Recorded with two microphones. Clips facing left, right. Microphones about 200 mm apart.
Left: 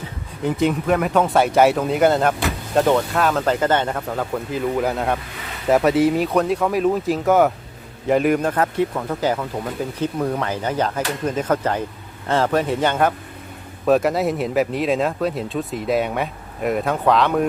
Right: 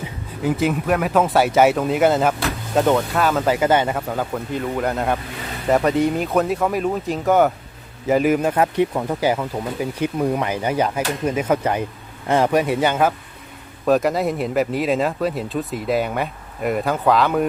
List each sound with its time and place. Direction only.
0.4 s speech: 5° right (ahead or behind)